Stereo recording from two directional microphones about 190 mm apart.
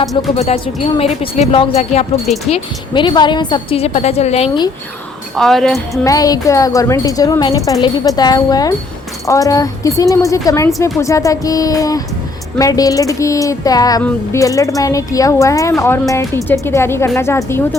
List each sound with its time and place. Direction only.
0.3 s a woman's voice: 35° left (ahead or behind)
5.3 s speech: centre (ahead or behind)
6.1 s jingle bell: 20° left (ahead or behind)
9.2 s speech: 15° left (ahead or behind)